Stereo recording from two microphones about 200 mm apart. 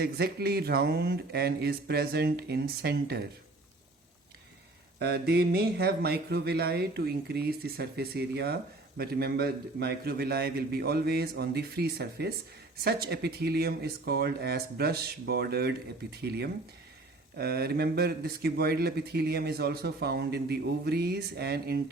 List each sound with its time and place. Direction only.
0.0 s speech: 50° right (ahead or behind)
4.9 s speech: 55° right (ahead or behind)
17.3 s speech: 50° right (ahead or behind)